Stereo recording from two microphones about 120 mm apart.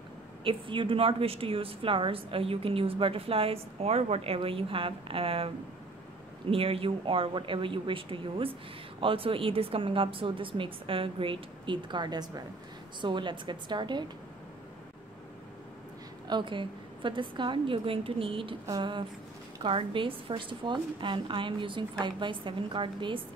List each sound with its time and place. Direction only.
0.4 s a woman's voice: 45° right (ahead or behind)
6.5 s a woman's voice: 50° right (ahead or behind)
16.3 s a woman's voice: 40° right (ahead or behind)